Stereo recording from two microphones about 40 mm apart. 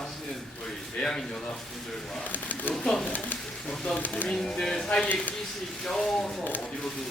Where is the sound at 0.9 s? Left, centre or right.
Left.